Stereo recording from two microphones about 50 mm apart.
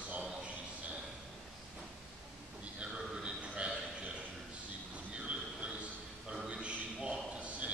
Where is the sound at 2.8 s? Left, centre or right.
Right.